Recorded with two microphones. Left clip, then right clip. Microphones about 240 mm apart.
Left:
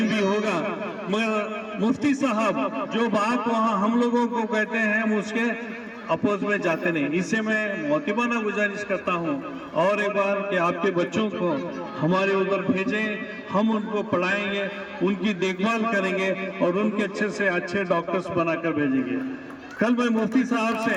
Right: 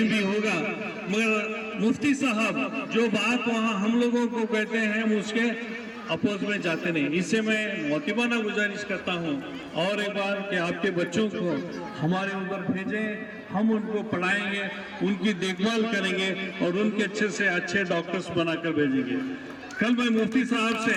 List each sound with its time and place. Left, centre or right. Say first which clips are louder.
0.0 s a sound: left 2 dB; centre
1.1 s a man's voice: even; centre
18.3 s a man's voice: left 2 dB; centre
19.8 s a man's voice: left 2 dB; left